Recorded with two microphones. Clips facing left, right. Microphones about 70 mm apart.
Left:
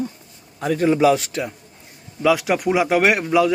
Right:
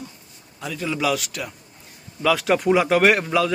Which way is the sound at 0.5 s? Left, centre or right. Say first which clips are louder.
Left 9 dB; left.